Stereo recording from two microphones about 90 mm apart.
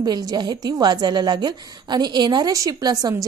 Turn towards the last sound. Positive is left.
turn(degrees=-45)  # may be behind; listen again after turning